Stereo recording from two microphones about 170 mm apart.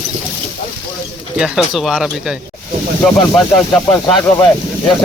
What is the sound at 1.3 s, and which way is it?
Speech, 5° right (ahead or behind).